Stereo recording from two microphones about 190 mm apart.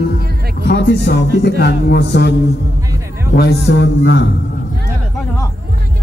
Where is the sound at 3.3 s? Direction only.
60° left (ahead or behind).